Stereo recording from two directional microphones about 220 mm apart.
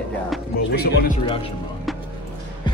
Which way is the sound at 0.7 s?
45° left (ahead or behind).